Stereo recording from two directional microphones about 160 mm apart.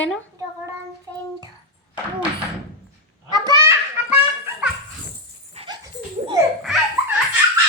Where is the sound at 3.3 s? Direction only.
20° right (ahead or behind).